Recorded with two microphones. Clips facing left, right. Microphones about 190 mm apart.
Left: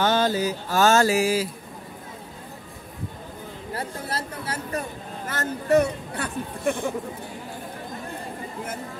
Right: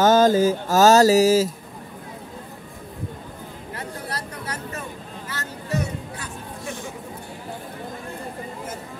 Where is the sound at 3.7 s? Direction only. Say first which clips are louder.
Left 2 dB; 25° left (ahead or behind).